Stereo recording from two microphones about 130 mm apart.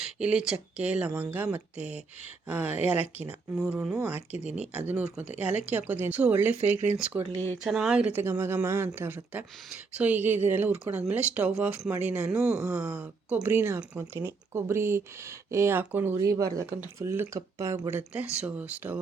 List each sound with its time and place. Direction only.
0.0 s speech: 10° right (ahead or behind)
8.1 s speech: 15° right (ahead or behind)
18.1 s speech: 10° right (ahead or behind)